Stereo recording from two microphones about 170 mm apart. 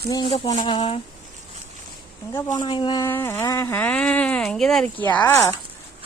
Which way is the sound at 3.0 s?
15° left (ahead or behind).